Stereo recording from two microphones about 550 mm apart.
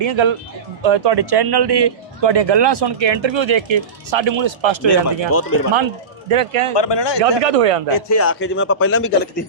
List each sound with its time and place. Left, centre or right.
0.0 s speech: right
5.3 s a man's voice: left
5.7 s speech: right
6.7 s speech: left
7.2 s speech: right
7.9 s a man's voice: left